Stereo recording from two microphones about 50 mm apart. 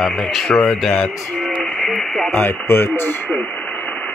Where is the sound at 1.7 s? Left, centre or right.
Centre.